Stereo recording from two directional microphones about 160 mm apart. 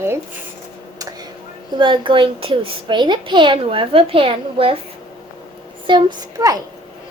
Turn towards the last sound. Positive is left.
turn(degrees=-20)  # may be behind; listen again after turning